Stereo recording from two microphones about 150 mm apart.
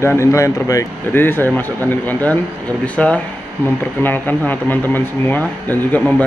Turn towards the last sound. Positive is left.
turn(degrees=10)  # may be behind; listen again after turning